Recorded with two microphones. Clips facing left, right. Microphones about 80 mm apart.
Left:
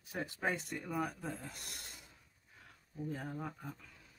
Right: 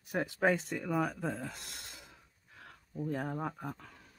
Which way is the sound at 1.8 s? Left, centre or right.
Right.